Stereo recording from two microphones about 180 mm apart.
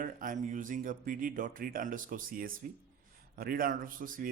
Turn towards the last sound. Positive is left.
turn(degrees=-50)  # may be behind; listen again after turning